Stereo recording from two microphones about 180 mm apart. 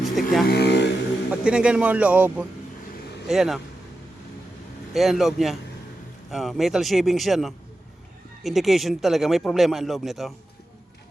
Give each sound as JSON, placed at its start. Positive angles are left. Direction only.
{"t": 0.0, "sound": "music", "side_deg": 0}
{"t": 0.4, "sound": "speech", "side_deg": 65}
{"t": 1.3, "sound": "speech", "side_deg": -5}
{"t": 4.9, "sound": "speech", "side_deg": 0}